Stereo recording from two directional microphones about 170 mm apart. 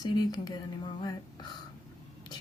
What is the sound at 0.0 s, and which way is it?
Speech, 25° left (ahead or behind).